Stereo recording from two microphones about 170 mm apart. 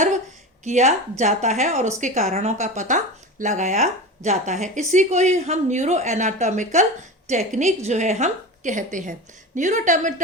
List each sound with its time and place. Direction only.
0.6 s speech: 45° right (ahead or behind)